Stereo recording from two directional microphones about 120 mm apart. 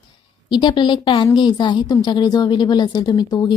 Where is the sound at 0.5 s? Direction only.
40° left (ahead or behind).